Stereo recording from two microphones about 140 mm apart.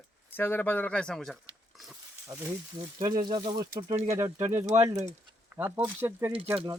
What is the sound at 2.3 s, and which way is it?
Speech, 20° right (ahead or behind).